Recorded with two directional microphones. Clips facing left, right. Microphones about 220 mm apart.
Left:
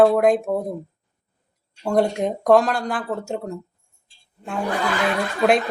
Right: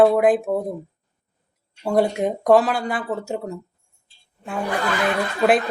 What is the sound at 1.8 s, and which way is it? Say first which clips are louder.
Speech: even; 5° right (ahead or behind).